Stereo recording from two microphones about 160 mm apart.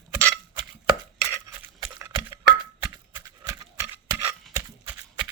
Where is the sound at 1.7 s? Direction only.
20° right (ahead or behind).